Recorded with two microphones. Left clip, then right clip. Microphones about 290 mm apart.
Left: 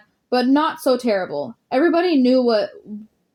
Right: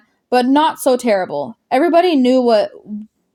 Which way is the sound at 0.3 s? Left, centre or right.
Right.